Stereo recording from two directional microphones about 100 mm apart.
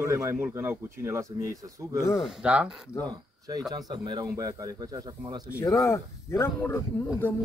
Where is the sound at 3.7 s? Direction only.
50° right (ahead or behind).